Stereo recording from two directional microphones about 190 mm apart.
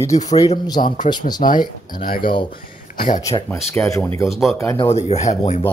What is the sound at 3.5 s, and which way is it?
Speech, 15° left (ahead or behind).